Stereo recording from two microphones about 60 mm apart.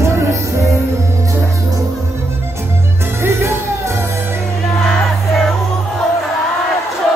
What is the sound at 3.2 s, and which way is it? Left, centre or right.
Music, right.